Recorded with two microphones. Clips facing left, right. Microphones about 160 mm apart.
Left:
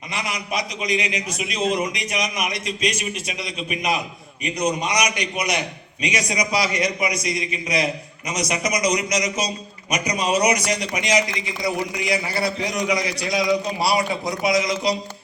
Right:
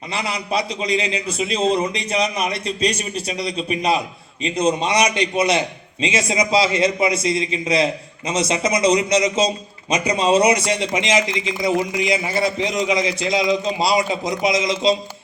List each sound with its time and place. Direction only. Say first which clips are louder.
0.1 s a man's voice: right 4 dB; 30° right (ahead or behind)